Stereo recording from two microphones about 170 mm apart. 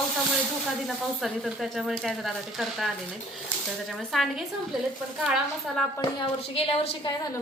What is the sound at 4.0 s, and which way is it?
Speech, centre (ahead or behind).